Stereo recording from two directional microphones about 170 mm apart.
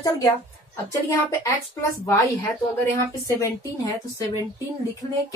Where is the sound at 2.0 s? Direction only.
20° left (ahead or behind).